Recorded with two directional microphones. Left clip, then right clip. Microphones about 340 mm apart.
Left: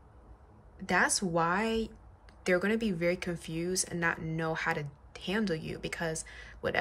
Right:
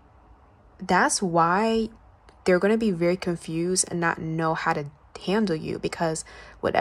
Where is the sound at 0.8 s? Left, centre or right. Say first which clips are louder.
Right 7 dB; centre.